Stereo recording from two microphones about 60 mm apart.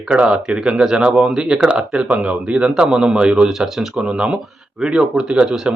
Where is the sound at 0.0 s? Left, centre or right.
Centre.